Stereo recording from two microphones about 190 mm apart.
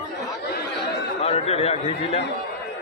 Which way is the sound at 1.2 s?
35° left (ahead or behind).